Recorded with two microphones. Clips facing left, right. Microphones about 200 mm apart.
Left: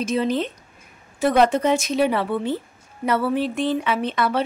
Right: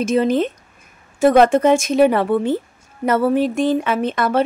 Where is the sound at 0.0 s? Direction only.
50° right (ahead or behind).